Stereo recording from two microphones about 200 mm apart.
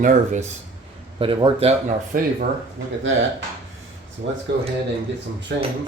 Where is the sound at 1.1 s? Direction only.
25° right (ahead or behind).